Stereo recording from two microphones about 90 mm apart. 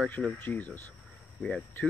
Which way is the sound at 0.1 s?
20° left (ahead or behind).